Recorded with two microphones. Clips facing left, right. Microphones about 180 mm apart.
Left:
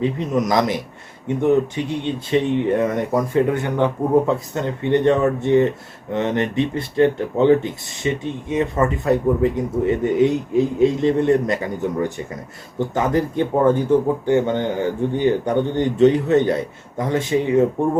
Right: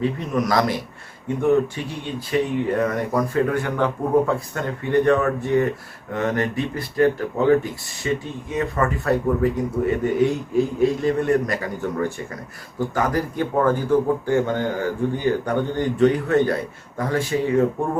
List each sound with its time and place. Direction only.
0.0 s speech: 20° left (ahead or behind)